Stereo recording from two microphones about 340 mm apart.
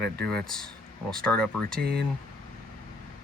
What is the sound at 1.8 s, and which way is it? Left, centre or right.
Speech, right.